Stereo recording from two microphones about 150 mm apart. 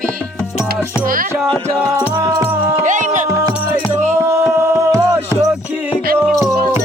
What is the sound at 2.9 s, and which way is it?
Music, 55° right (ahead or behind).